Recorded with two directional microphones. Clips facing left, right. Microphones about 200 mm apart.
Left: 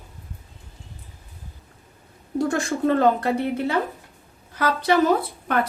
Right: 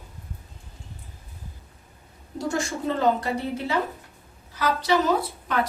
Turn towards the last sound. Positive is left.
turn(degrees=55)  # may be behind; listen again after turning